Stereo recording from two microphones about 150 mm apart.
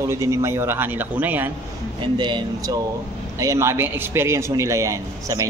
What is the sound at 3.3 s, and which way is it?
A man's voice, 20° right (ahead or behind).